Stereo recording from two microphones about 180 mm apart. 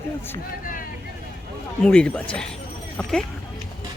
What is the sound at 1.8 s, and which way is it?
Speech, 5° left (ahead or behind).